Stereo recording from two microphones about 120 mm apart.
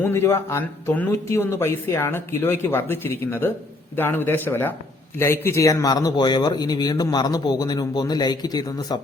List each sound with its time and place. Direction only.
0.0 s speech: 20° left (ahead or behind)